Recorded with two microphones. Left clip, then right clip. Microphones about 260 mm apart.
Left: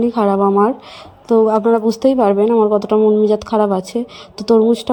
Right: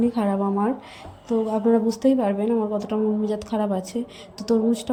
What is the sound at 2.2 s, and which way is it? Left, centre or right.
Speech, centre.